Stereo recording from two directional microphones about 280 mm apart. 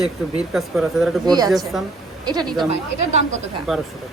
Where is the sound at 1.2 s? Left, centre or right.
Centre.